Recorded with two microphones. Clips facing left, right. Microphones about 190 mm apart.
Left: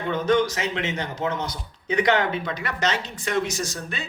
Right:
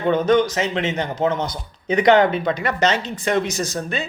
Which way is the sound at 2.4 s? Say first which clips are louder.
Right 7 dB; 25° right (ahead or behind).